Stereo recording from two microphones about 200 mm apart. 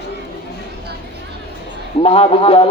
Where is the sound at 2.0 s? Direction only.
25° left (ahead or behind).